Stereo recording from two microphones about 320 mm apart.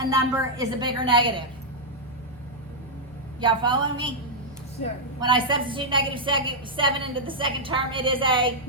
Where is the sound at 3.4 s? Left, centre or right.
Centre.